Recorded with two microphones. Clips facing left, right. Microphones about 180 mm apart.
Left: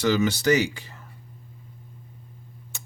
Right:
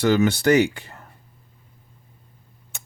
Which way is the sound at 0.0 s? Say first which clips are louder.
Right 3 dB; 55° right (ahead or behind).